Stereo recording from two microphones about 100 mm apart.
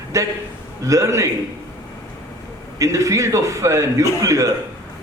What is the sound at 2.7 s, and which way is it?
Speech, 30° right (ahead or behind).